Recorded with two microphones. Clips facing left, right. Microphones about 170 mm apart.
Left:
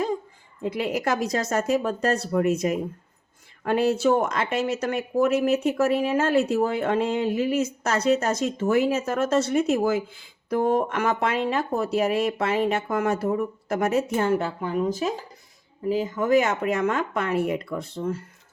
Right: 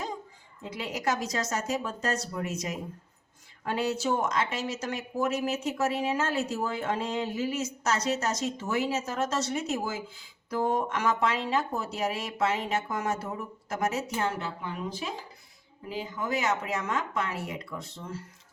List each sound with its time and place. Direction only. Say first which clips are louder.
0.6 s speech: left 7 dB; 55° left (ahead or behind)